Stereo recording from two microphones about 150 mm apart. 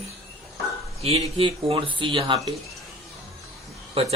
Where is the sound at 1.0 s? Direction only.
40° right (ahead or behind).